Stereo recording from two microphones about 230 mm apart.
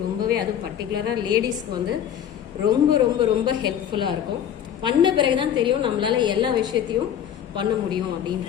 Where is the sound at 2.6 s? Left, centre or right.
Centre.